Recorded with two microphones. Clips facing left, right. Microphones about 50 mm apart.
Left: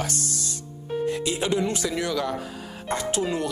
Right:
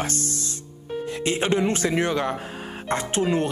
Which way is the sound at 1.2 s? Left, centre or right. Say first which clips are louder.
Right 3 dB; right.